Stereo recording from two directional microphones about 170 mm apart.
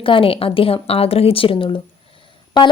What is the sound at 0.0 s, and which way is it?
A woman's voice, 30° left (ahead or behind).